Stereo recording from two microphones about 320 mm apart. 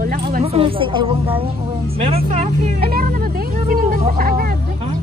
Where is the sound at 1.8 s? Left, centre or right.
Centre.